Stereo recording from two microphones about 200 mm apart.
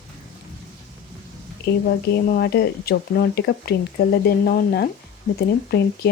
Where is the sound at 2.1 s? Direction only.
55° left (ahead or behind).